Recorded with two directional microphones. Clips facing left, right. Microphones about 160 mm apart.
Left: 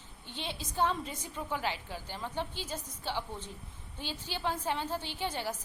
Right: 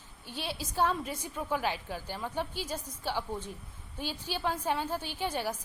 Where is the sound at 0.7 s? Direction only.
10° right (ahead or behind).